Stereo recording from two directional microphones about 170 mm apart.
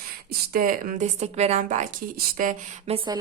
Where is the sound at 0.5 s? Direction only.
55° right (ahead or behind).